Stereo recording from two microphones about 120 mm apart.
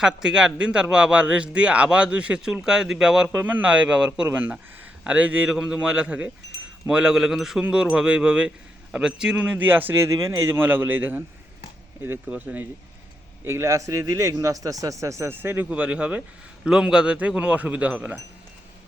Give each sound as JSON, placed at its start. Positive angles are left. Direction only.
{"t": 0.0, "sound": "speech", "side_deg": -5}